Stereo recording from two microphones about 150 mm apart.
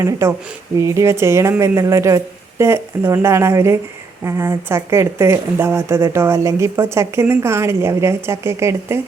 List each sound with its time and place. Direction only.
0.0 s speech: 20° right (ahead or behind)